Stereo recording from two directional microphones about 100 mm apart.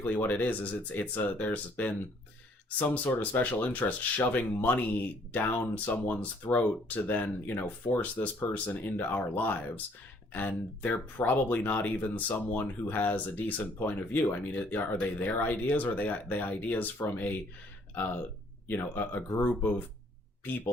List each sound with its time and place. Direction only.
0.0 s speech: 20° left (ahead or behind)